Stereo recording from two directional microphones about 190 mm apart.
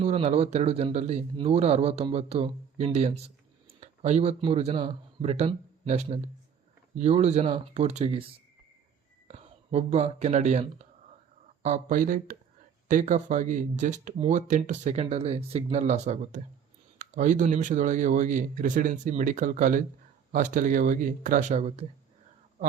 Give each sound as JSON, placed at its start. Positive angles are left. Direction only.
{"t": 0.0, "sound": "a man's voice", "side_deg": -35}
{"t": 9.2, "sound": "speech", "side_deg": -35}